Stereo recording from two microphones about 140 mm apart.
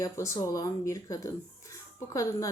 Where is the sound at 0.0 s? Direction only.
25° left (ahead or behind).